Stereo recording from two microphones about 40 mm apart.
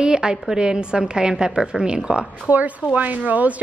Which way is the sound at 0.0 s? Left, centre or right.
Centre.